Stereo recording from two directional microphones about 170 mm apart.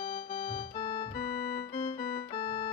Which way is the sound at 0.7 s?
30° left (ahead or behind).